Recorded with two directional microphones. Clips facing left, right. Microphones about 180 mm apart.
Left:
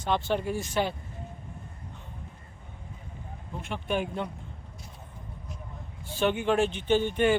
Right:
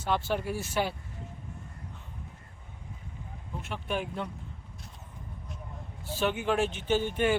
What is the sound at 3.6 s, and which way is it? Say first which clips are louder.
Speech: left 4 dB; centre (ahead or behind).